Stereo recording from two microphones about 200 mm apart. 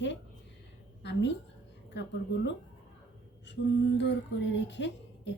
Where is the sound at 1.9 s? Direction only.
60° left (ahead or behind).